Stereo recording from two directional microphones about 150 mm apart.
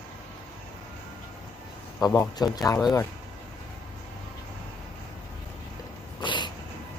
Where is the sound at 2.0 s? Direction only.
25° left (ahead or behind).